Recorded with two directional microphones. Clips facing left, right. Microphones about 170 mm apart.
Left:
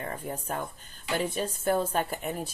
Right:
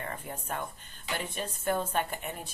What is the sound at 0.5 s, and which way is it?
Speech, 40° left (ahead or behind).